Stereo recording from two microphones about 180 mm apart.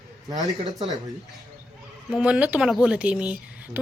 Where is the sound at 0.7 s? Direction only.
Centre (ahead or behind).